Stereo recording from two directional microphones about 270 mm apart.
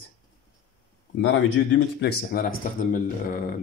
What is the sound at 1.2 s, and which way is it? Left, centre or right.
Speech, left.